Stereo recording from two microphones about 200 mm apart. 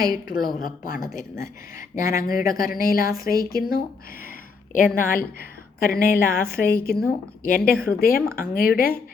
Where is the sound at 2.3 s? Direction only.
45° left (ahead or behind).